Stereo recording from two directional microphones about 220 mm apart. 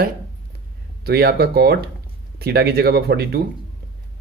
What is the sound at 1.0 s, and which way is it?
Speech, 45° right (ahead or behind).